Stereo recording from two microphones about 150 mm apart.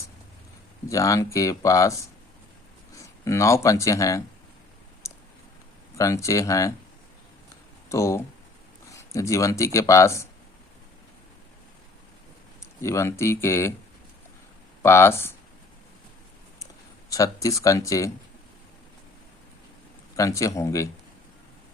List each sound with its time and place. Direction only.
0.9 s speech: 20° left (ahead or behind)
5.0 s a sound: 20° left (ahead or behind)
6.0 s speech: 20° left (ahead or behind)
7.9 s speech: 20° left (ahead or behind)
12.8 s speech: 20° left (ahead or behind)
14.8 s speech: 15° left (ahead or behind)
17.1 s speech: 20° left (ahead or behind)
20.1 s speech: 20° left (ahead or behind)